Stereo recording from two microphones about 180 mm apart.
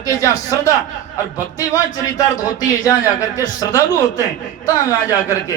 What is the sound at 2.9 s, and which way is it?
Speech, 20° left (ahead or behind).